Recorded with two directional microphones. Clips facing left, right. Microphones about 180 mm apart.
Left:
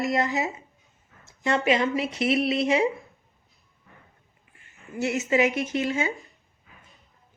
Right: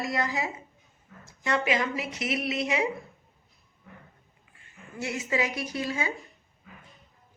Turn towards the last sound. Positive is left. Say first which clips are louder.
# left 5 dB
turn(degrees=25)  # may be behind; listen again after turning